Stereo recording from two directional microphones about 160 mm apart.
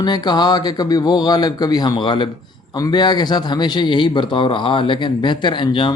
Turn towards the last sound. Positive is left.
turn(degrees=30)  # may be behind; listen again after turning